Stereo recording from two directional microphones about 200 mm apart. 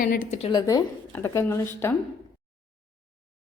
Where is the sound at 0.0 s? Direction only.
45° left (ahead or behind).